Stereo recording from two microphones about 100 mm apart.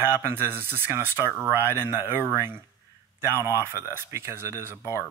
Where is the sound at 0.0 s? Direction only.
25° right (ahead or behind).